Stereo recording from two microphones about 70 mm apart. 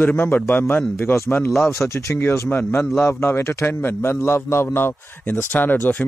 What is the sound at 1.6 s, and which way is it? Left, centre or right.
Speech, left.